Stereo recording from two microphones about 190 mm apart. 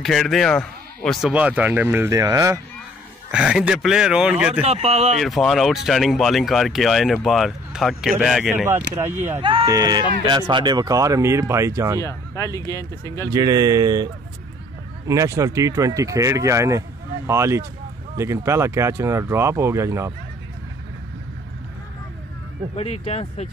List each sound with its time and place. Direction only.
0.0 s speech: centre (ahead or behind); by 2.6 s 15° right (ahead or behind)
3.3 s speech: 5° right (ahead or behind)
4.6 s speech: 35° right (ahead or behind)
5.1 s speech: centre (ahead or behind)
8.9 s speech: 10° right (ahead or behind)
9.4 s speech: 25° right (ahead or behind)
12.0 s speech: 15° left (ahead or behind)
13.3 s speech: 20° right (ahead or behind)
15.0 s speech: 15° right (ahead or behind)
22.8 s speech: 30° left (ahead or behind)